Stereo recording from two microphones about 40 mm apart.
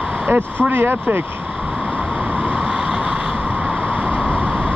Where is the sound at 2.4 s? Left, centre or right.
Right.